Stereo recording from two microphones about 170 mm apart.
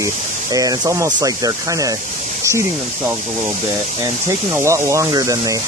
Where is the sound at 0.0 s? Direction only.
20° right (ahead or behind).